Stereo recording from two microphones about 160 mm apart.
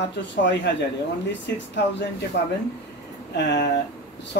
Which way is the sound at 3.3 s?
90° left.